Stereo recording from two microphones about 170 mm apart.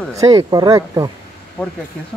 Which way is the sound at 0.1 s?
20° right (ahead or behind).